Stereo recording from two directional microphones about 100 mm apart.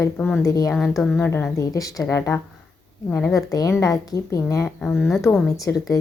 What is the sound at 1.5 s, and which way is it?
Speech, 35° left (ahead or behind).